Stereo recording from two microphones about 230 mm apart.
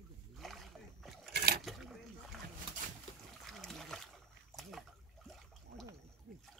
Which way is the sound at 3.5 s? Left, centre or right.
Centre.